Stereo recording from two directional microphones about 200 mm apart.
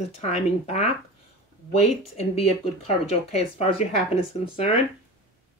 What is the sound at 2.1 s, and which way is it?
Speech, 30° left (ahead or behind).